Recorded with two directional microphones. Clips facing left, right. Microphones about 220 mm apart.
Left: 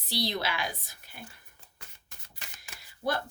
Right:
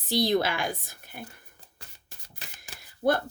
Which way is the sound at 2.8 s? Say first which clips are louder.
Right 7 dB; 50° right (ahead or behind).